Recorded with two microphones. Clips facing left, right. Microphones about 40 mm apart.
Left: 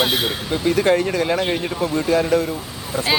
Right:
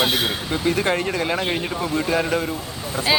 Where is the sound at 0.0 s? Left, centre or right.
Centre.